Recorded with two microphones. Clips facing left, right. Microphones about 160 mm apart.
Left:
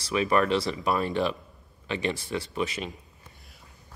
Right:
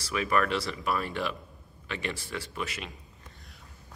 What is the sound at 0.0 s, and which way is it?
Speech, 25° left (ahead or behind).